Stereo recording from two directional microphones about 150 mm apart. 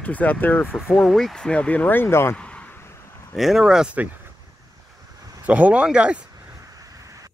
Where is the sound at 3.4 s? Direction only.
Centre (ahead or behind).